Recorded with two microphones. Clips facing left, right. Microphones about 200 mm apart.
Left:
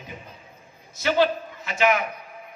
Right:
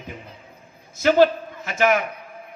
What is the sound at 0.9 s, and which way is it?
A man's voice, 50° right (ahead or behind).